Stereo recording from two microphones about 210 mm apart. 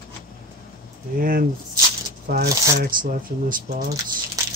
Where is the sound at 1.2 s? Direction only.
40° right (ahead or behind).